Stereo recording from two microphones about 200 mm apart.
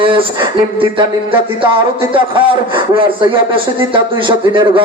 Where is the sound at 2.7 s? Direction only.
25° right (ahead or behind).